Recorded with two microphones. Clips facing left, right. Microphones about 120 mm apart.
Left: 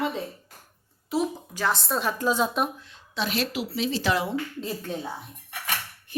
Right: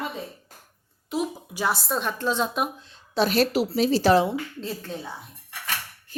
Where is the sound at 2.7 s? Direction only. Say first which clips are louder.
Right 8 dB; 30° right (ahead or behind).